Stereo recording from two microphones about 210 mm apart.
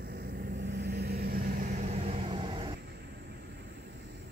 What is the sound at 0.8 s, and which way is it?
Vehicle, 50° right (ahead or behind).